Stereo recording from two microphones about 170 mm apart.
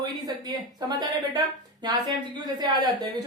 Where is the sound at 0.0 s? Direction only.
25° right (ahead or behind).